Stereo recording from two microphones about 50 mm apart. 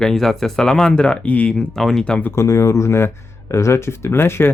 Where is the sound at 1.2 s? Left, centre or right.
Left.